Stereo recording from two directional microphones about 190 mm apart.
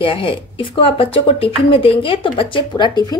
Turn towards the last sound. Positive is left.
turn(degrees=20)  # may be behind; listen again after turning